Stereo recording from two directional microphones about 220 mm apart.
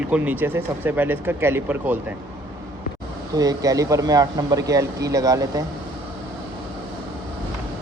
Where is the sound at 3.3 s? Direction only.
15° right (ahead or behind).